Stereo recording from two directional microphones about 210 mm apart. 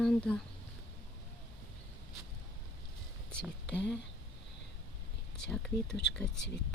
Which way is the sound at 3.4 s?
5° left (ahead or behind).